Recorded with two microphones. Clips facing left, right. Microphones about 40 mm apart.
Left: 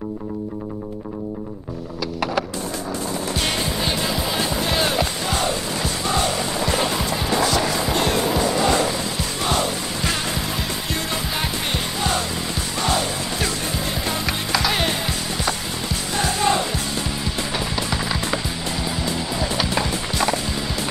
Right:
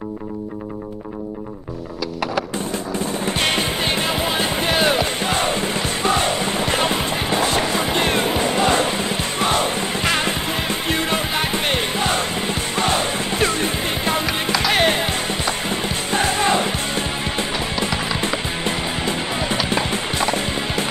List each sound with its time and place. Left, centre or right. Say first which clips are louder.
3.3 s music: right 4 dB; right
13.4 s music: right 7 dB; right
14.2 s music: right 2 dB; centre
14.7 s music: right 5 dB; right
19.0 s music: right 2 dB; right
19.5 s music: right 2 dB; right